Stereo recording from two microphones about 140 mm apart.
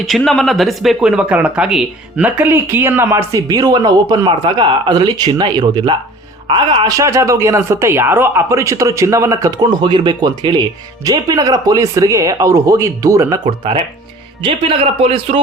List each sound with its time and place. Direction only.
0.0 s speech: 5° left (ahead or behind); by 13.4 s 20° right (ahead or behind)
13.4 s a man's voice: 45° right (ahead or behind)